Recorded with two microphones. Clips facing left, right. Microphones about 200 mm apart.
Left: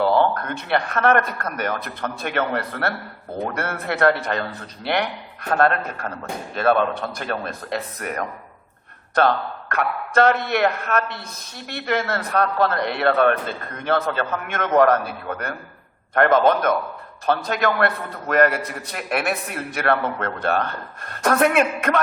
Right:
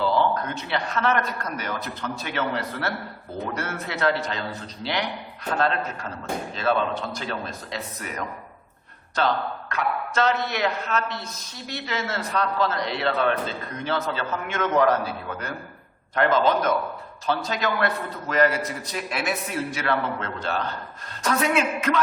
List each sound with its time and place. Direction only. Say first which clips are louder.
0.0 s a man's voice: left 4 dB; 60° left (ahead or behind)